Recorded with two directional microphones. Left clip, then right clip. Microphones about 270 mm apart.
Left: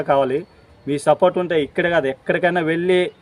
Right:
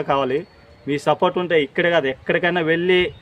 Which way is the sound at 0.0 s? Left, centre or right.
Centre.